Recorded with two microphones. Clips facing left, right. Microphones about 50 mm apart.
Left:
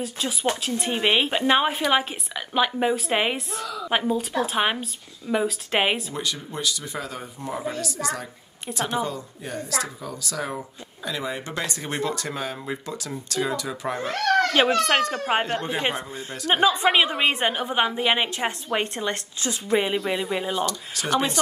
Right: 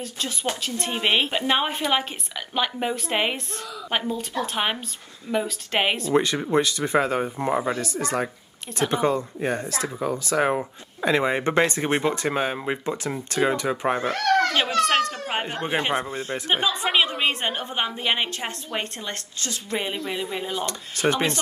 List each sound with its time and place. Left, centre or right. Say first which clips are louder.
0.0 s a woman's voice: left 3 dB; centre
6.1 s speech: right 10 dB; right
14.5 s speech: left 1 dB; centre
15.4 s speech: left 2 dB; centre
15.9 s speech: right 5 dB; right
16.5 s speech: left 5 dB; left
16.9 s a woman's voice: left 1 dB; centre
20.6 s speech: right 4 dB; right